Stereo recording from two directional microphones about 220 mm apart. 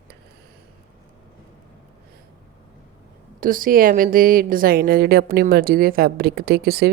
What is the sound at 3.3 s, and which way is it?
Speech, 40° right (ahead or behind).